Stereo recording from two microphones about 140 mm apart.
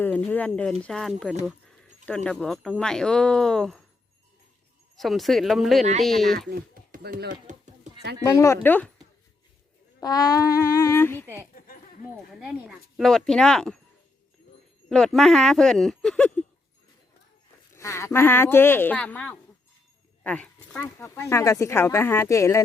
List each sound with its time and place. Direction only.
0.0 s speech: 10° left (ahead or behind)
4.9 s speech: centre (ahead or behind)
6.5 s speech: 90° right
7.5 s a sound: 60° right (ahead or behind)
8.2 s speech: 20° left (ahead or behind)
10.0 s speech: 25° left (ahead or behind)
11.5 s a sound: 90° left
12.3 s speech: 5° right (ahead or behind)
14.8 s speech: 5° left (ahead or behind)
17.7 s speech: 20° left (ahead or behind)
21.0 s speech: 20° left (ahead or behind)